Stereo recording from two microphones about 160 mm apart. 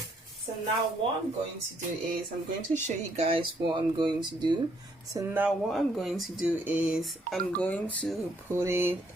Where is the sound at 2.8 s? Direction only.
35° right (ahead or behind).